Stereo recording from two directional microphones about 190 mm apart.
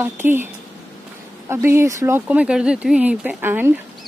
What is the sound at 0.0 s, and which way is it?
Speech, 10° right (ahead or behind).